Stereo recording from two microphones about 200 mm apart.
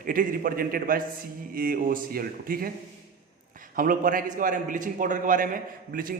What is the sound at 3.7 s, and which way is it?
A man's voice, 45° right (ahead or behind).